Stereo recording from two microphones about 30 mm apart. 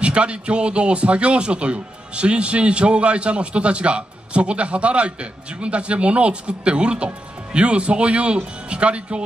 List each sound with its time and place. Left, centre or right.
0.0 s speech: right